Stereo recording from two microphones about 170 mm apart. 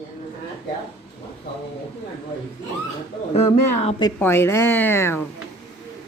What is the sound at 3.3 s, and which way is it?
Speech, 40° left (ahead or behind).